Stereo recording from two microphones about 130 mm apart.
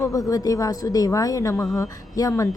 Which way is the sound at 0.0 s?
25° left (ahead or behind).